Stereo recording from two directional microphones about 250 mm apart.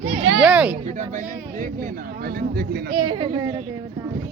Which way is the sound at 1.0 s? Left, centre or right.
Right.